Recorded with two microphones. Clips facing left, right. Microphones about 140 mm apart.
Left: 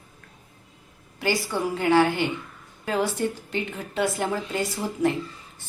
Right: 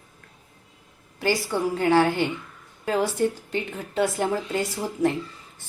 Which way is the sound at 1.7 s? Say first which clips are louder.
Even; 35° right (ahead or behind).